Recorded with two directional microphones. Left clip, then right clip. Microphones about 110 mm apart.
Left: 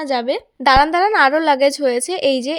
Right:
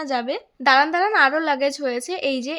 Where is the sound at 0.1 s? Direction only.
40° left (ahead or behind).